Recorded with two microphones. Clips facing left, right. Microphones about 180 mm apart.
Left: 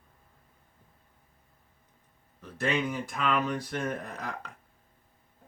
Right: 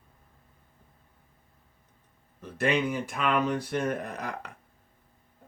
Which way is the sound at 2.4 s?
15° right (ahead or behind).